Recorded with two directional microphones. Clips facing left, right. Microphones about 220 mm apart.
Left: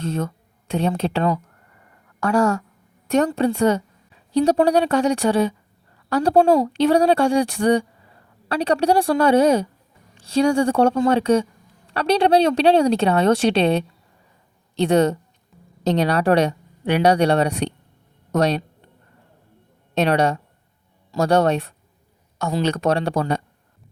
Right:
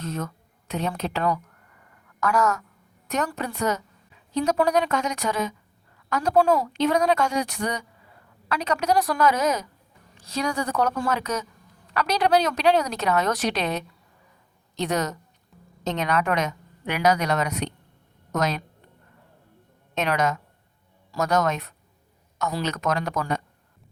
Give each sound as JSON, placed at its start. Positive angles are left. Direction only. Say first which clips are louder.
{"t": 0.0, "sound": "a woman's voice", "louder": "left 6 dB", "side_deg": 30}
{"t": 19.9, "sound": "speech", "louder": "left 6 dB", "side_deg": 35}